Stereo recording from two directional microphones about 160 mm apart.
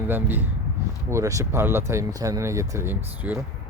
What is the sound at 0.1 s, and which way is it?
Speech, 10° right (ahead or behind).